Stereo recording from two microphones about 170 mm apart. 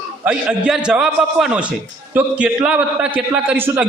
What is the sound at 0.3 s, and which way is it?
A man's voice, 5° right (ahead or behind).